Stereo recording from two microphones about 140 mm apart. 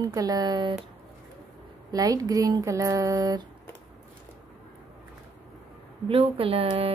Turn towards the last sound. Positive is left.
turn(degrees=-45)  # may be behind; listen again after turning